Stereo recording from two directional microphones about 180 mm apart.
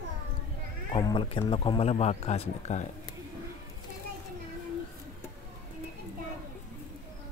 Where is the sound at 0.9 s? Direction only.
25° left (ahead or behind).